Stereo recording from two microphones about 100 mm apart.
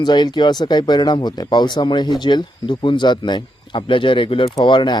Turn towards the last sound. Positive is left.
turn(degrees=50)  # may be behind; listen again after turning